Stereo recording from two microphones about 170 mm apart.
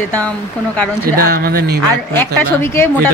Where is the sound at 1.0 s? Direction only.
60° right (ahead or behind).